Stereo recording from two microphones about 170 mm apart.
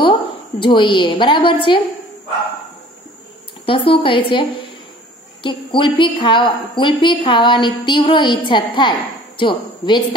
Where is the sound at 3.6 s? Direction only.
30° left (ahead or behind).